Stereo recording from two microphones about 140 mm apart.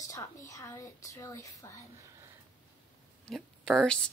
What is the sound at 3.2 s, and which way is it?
Speech, 5° left (ahead or behind).